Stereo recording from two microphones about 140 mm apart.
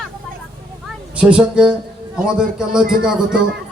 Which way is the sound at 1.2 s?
10° right (ahead or behind).